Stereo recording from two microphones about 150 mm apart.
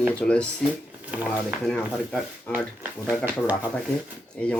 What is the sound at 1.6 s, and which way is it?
Speech, 5° left (ahead or behind).